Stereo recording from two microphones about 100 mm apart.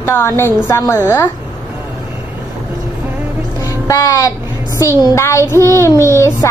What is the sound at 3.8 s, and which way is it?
A woman's voice, 35° left (ahead or behind).